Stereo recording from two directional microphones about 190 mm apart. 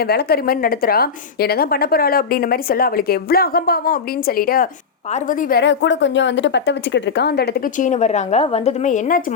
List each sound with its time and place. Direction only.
0.0 s a woman's voice: 55° left (ahead or behind)
5.6 s speech: 70° left (ahead or behind); by 9.2 s 45° left (ahead or behind)